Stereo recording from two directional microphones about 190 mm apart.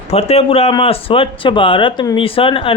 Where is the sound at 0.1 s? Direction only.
30° left (ahead or behind).